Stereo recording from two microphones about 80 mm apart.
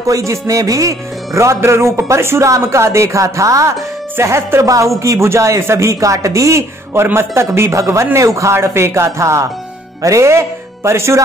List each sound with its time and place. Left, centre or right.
0.0 s speech: right
6.9 s speech: right